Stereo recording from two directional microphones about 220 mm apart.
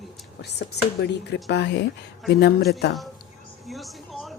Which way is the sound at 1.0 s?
50° left (ahead or behind).